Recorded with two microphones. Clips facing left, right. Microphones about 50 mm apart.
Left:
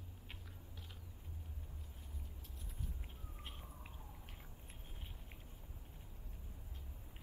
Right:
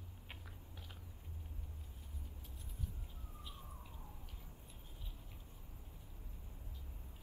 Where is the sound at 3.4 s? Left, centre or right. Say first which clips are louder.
Even; left.